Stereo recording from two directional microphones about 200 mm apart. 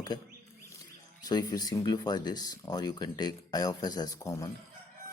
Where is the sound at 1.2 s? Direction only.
20° left (ahead or behind).